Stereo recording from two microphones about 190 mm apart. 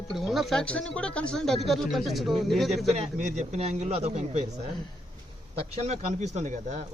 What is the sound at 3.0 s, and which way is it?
Speech, 35° right (ahead or behind).